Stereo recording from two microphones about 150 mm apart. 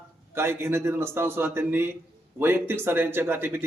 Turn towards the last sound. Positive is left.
turn(degrees=-15)  # may be behind; listen again after turning